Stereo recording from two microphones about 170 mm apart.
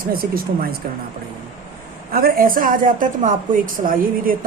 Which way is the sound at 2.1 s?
60° right (ahead or behind).